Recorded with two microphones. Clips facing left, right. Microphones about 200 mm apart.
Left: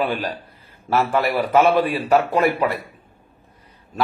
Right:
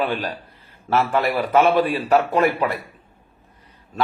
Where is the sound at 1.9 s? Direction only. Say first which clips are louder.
Even; 5° left (ahead or behind).